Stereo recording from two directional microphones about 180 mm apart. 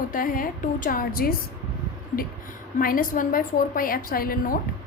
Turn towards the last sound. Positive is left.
turn(degrees=55)  # may be behind; listen again after turning